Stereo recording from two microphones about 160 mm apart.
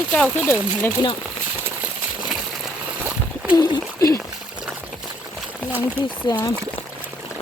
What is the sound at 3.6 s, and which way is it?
Speech, 25° left (ahead or behind).